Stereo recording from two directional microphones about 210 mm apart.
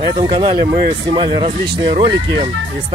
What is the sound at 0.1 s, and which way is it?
Speech, 25° right (ahead or behind).